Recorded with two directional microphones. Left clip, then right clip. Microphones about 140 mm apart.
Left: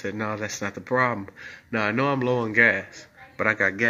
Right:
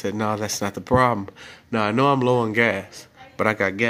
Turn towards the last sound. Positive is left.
turn(degrees=-25)  # may be behind; listen again after turning